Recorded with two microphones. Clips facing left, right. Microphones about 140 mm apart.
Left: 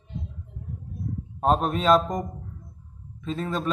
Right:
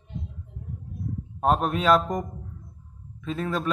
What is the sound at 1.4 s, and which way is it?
Speech, 5° right (ahead or behind).